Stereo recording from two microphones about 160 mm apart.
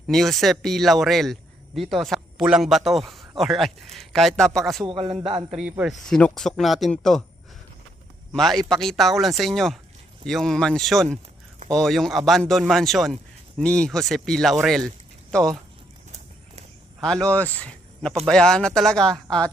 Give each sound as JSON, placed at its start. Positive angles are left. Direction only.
{"t": 0.1, "sound": "speech", "side_deg": 0}
{"t": 4.9, "sound": "a man's voice", "side_deg": -35}
{"t": 5.5, "sound": "speech", "side_deg": -5}
{"t": 8.3, "sound": "speech", "side_deg": 0}
{"t": 17.0, "sound": "speech", "side_deg": 5}